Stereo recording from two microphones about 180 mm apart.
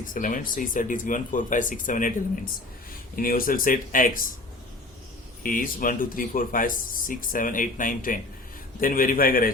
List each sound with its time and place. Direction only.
0.1 s speech: 50° left (ahead or behind)
5.4 s speech: 50° left (ahead or behind)